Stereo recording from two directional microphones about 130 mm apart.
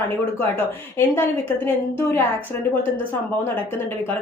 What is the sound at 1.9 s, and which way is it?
Speech, 20° left (ahead or behind).